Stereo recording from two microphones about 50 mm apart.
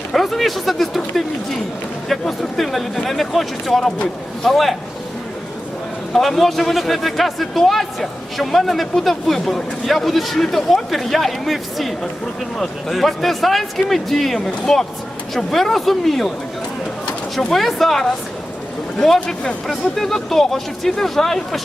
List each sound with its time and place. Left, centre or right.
0.1 s a man's voice: centre
6.1 s a man's voice: centre
17.3 s a man's voice: centre
19.6 s a man's voice: centre